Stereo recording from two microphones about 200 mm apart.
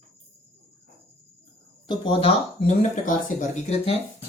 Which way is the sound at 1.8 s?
25° left (ahead or behind).